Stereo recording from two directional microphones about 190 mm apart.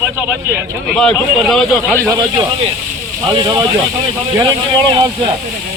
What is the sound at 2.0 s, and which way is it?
Speech, 20° right (ahead or behind).